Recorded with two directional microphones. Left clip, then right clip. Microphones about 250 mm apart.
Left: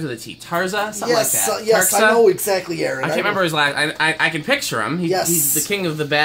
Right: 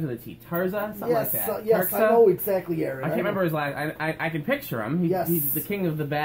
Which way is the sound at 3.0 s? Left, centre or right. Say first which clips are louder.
Left 8 dB; centre.